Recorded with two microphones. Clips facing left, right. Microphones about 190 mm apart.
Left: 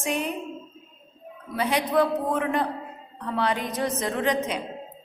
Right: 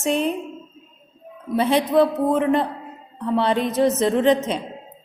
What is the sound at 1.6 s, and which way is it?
A woman's voice, 25° right (ahead or behind).